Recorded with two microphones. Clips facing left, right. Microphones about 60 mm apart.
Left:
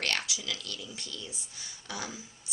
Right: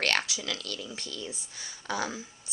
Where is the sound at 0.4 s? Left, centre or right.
Right.